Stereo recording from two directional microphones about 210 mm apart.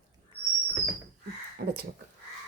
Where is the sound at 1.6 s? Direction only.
50° right (ahead or behind).